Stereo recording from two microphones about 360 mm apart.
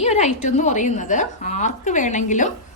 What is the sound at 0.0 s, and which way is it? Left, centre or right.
A woman's voice, centre.